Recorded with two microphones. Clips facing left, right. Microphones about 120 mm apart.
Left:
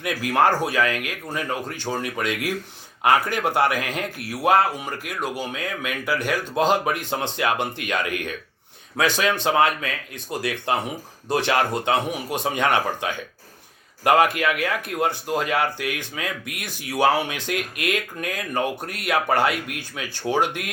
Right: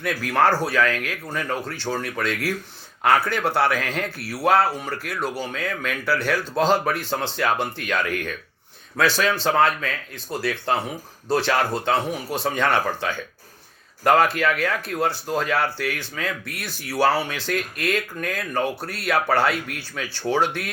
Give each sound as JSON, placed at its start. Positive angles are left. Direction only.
{"t": 0.0, "sound": "speech", "side_deg": 10}
{"t": 20.2, "sound": "speech", "side_deg": 15}